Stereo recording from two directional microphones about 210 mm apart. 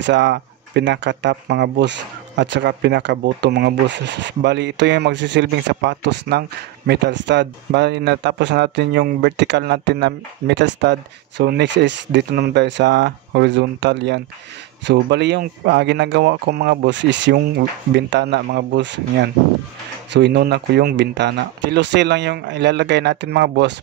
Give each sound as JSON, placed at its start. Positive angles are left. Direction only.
{"t": 0.0, "sound": "speech", "side_deg": -55}